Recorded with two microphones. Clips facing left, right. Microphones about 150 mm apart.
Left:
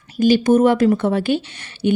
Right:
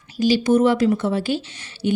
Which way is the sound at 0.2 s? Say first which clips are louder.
Left 3 dB; 50° left (ahead or behind).